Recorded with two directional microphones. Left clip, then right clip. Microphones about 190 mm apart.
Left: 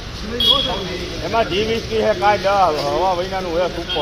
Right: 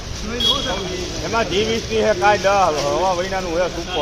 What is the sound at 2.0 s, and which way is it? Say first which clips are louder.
Speech: right 1 dB; 60° right (ahead or behind).